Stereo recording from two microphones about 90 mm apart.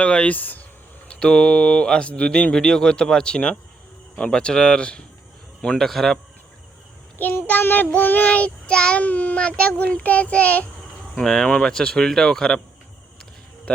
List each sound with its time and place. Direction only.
0.0 s child singing: 10° left (ahead or behind)
5.6 s a man's voice: 5° left (ahead or behind)
7.2 s child singing: 20° left (ahead or behind)
11.1 s child singing: 5° left (ahead or behind)